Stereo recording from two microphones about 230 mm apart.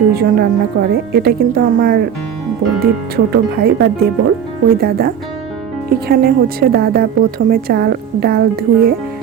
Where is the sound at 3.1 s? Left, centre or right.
Right.